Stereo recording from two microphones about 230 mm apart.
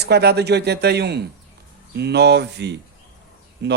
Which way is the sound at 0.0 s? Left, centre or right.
Right.